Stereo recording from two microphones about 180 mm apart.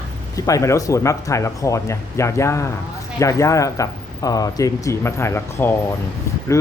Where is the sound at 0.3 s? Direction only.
20° left (ahead or behind).